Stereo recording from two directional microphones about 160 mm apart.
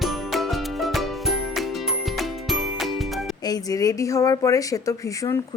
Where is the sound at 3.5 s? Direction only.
25° left (ahead or behind).